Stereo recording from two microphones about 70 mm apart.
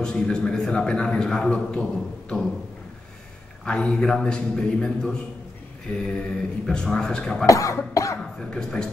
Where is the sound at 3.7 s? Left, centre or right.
Centre.